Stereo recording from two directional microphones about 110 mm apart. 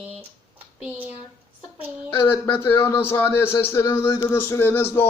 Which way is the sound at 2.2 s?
20° left (ahead or behind).